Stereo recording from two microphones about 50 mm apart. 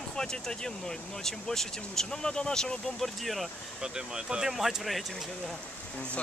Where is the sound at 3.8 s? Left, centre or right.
Centre.